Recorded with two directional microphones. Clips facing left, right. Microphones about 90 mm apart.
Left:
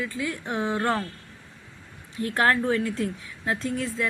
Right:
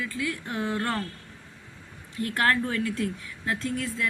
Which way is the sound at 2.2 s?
25° left (ahead or behind).